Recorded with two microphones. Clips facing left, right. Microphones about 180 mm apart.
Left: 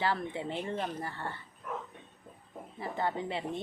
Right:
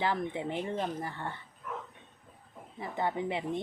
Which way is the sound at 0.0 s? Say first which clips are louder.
Right 1 dB; 15° right (ahead or behind).